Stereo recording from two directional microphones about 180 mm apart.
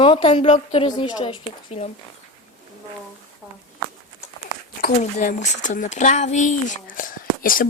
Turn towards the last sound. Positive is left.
turn(degrees=50)  # may be behind; listen again after turning